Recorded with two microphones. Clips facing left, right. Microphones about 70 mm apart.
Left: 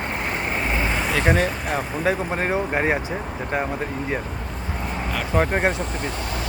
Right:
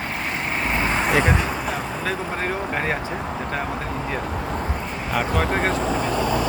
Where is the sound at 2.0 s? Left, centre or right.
Left.